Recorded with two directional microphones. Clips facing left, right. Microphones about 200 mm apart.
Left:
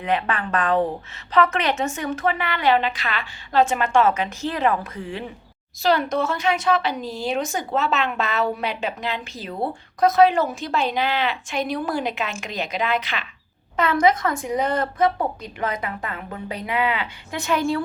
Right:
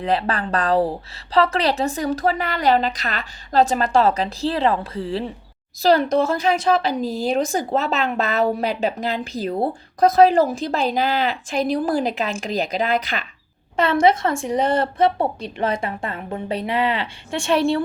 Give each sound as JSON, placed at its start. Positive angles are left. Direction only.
{"t": 0.0, "sound": "a woman's voice", "side_deg": -35}